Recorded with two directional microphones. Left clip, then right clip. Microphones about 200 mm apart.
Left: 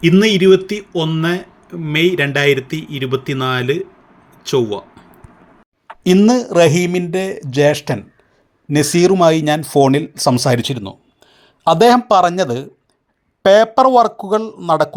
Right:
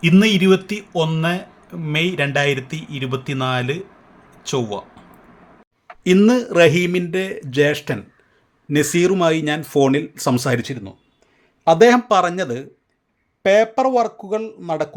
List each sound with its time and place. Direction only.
0.0 s speech: centre (ahead or behind)
6.1 s speech: 5° left (ahead or behind)
13.6 s speech: centre (ahead or behind)
14.2 s speech: 20° left (ahead or behind)